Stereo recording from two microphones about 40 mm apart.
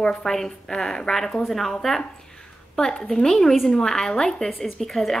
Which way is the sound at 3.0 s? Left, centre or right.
Centre.